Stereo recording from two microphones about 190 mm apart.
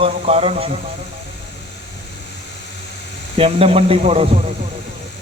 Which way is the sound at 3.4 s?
30° right (ahead or behind).